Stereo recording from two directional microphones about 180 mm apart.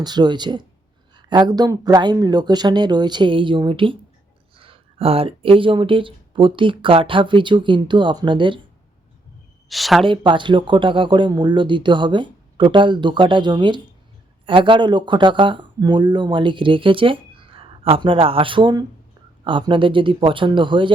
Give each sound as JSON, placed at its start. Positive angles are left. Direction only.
{"t": 0.0, "sound": "speech", "side_deg": -25}
{"t": 9.6, "sound": "speech", "side_deg": 0}
{"t": 10.1, "sound": "speech", "side_deg": -25}